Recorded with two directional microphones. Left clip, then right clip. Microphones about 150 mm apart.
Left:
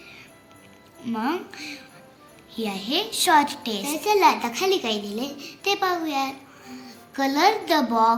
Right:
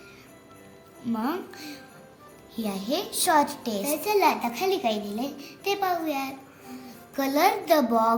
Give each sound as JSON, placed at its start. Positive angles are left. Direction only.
{"t": 1.0, "sound": "a child's voice", "side_deg": -45}
{"t": 6.8, "sound": "music", "side_deg": -60}